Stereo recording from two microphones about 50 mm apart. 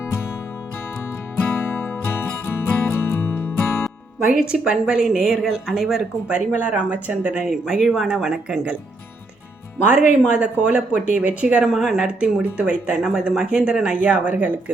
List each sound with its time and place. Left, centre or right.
1.5 s music: left
4.5 s a woman's voice: centre
6.2 s speech: right
7.4 s a woman's voice: centre
9.8 s speech: right
11.6 s a woman's voice: centre
11.9 s a woman's voice: right